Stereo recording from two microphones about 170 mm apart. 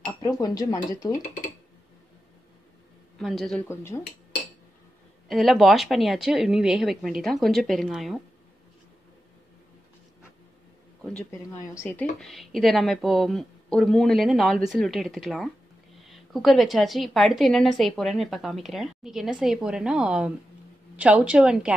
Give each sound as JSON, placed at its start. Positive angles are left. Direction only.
{"t": 0.0, "sound": "speech", "side_deg": 20}
{"t": 3.2, "sound": "a woman's voice", "side_deg": 0}
{"t": 3.6, "sound": "speech", "side_deg": 15}
{"t": 5.3, "sound": "a woman's voice", "side_deg": 0}
{"t": 11.6, "sound": "speech", "side_deg": 15}
{"t": 12.2, "sound": "a woman's voice", "side_deg": 0}